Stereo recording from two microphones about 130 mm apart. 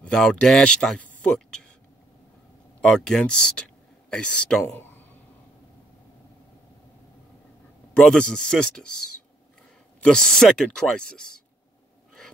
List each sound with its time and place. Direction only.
0.0 s speech: 5° left (ahead or behind)
2.8 s speech: 5° left (ahead or behind)
4.7 s a sound: 15° left (ahead or behind)
7.9 s speech: 5° left (ahead or behind)
10.0 s speech: 5° left (ahead or behind)